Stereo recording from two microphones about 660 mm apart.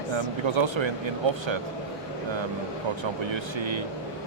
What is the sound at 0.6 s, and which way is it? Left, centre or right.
Speech, right.